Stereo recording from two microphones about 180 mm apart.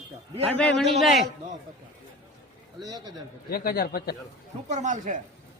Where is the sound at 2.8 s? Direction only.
20° right (ahead or behind).